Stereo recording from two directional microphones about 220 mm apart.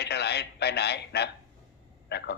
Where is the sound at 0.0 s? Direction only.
50° left (ahead or behind).